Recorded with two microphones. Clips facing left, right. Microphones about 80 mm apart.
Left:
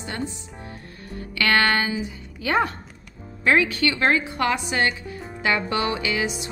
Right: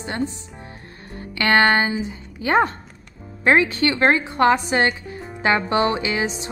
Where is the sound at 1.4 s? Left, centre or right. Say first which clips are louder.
Right 4 dB; right.